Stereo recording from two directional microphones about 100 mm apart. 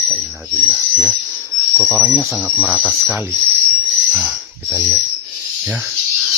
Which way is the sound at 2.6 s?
10° right (ahead or behind).